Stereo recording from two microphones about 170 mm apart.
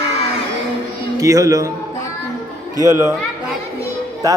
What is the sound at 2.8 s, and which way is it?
Speech, 15° right (ahead or behind).